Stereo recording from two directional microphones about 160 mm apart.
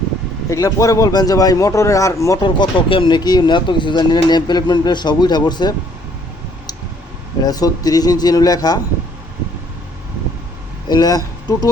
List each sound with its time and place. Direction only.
0.5 s speech: 20° left (ahead or behind)
7.4 s speech: 25° left (ahead or behind)
10.8 s speech: 25° left (ahead or behind)